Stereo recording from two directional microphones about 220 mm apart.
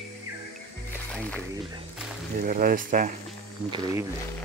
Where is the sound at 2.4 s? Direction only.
40° right (ahead or behind).